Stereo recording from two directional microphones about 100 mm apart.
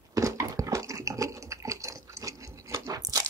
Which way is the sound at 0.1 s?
30° right (ahead or behind).